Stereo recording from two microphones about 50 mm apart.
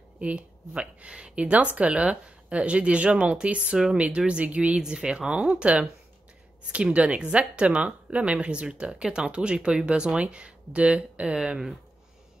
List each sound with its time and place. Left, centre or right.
0.2 s speech: right
4.7 s speech: centre